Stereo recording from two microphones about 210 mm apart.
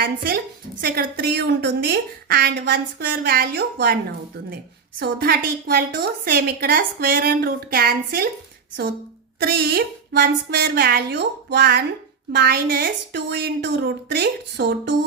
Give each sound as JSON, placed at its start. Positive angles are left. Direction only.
{"t": 0.8, "sound": "a woman's voice", "side_deg": -50}
{"t": 4.9, "sound": "a woman's voice", "side_deg": -50}
{"t": 9.4, "sound": "a woman's voice", "side_deg": -45}